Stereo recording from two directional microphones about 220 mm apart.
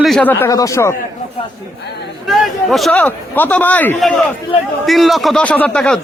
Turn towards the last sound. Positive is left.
turn(degrees=5)  # may be behind; listen again after turning